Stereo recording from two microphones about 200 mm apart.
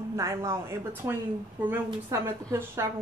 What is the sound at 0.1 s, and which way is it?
A woman's voice, 15° right (ahead or behind).